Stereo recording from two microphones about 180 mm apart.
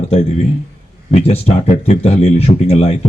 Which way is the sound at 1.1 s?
35° left (ahead or behind).